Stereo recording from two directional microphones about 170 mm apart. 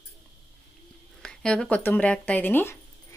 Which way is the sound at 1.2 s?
5° left (ahead or behind).